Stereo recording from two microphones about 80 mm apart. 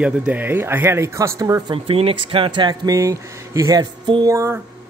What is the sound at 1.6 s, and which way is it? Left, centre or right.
Speech, right.